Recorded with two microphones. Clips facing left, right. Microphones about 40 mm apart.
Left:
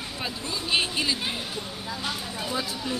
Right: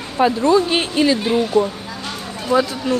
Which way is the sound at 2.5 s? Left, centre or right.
Right.